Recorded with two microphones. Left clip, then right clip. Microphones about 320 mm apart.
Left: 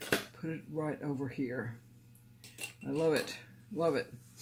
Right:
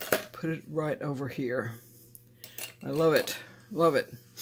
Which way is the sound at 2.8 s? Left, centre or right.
Right.